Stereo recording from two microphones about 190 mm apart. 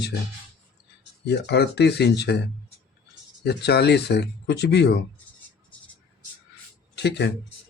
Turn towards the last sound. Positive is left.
turn(degrees=65)  # may be behind; listen again after turning